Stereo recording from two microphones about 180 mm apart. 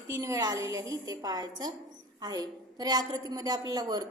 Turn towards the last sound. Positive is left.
turn(degrees=-20)  # may be behind; listen again after turning